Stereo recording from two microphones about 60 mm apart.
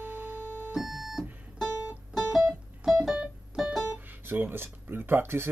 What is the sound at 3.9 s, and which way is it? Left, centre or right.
Speech, right.